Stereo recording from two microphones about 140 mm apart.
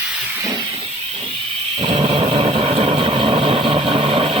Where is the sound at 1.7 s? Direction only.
40° right (ahead or behind).